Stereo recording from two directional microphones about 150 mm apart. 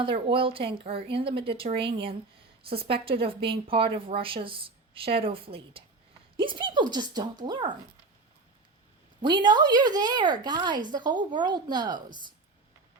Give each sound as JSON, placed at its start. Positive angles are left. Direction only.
{"t": 0.0, "sound": "a woman's voice", "side_deg": -35}
{"t": 9.2, "sound": "speech", "side_deg": -30}